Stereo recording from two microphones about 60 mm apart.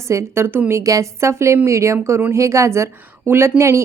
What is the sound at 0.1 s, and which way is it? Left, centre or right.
Speech, right.